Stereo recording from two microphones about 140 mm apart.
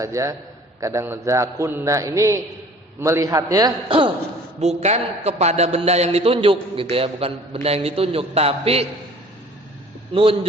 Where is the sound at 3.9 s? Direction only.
35° right (ahead or behind).